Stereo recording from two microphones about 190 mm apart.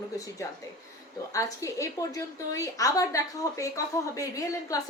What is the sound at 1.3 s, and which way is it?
A woman's voice, 15° left (ahead or behind).